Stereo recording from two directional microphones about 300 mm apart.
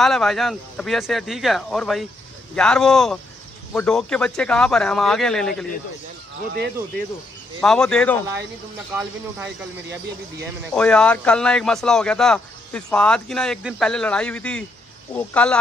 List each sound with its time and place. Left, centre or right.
0.0 s speech: centre
6.5 s speech: right
7.6 s speech: centre
10.7 s speech: centre